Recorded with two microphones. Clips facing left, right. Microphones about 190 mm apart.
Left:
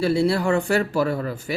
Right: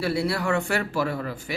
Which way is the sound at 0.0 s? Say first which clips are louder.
Left 5 dB; 30° left (ahead or behind).